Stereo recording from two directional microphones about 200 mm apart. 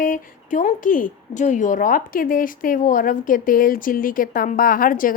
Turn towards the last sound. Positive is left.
turn(degrees=45)  # may be behind; listen again after turning